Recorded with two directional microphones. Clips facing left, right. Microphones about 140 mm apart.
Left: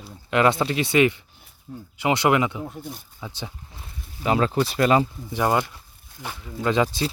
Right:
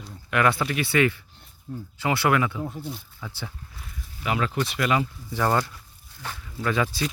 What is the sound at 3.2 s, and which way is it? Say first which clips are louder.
Speech: left 2 dB; 20° left (ahead or behind).